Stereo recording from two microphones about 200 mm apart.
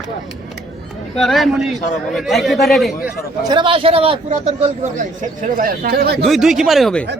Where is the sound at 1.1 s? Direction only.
Centre (ahead or behind).